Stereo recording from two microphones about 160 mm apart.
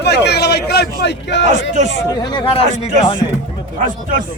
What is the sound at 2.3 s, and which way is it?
Speech, 35° left (ahead or behind).